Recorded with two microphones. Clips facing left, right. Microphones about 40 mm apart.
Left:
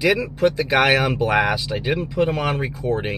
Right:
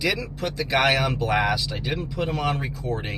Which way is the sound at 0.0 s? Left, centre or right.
Centre.